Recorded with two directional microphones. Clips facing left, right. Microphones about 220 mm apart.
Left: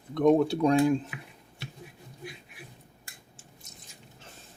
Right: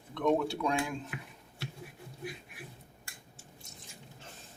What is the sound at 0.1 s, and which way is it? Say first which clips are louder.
Speech: left 7 dB; 40° left (ahead or behind).